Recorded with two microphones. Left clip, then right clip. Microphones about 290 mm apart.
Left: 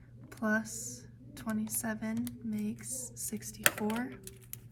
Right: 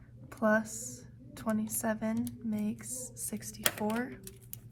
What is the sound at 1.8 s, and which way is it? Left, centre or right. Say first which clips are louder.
Speech: right 6 dB; centre.